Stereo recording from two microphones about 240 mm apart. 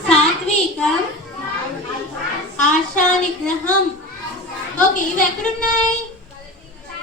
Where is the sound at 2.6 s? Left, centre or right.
Left.